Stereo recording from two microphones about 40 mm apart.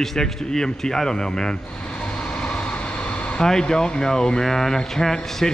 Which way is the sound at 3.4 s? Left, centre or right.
Centre.